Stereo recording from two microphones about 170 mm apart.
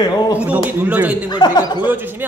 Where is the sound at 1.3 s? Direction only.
25° left (ahead or behind).